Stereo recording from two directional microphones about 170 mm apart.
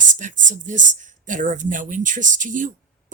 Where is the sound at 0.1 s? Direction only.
50° right (ahead or behind).